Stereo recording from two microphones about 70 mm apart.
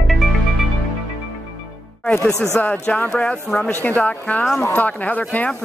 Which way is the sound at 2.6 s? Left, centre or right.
Left.